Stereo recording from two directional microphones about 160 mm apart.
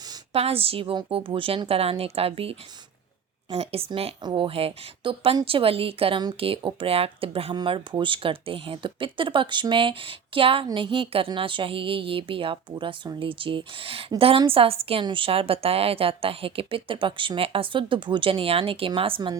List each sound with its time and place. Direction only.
0.3 s speech: 40° right (ahead or behind)